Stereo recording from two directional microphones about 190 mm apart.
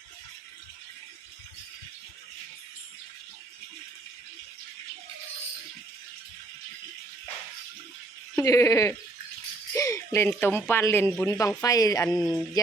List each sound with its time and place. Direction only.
8.4 s speech: 15° left (ahead or behind)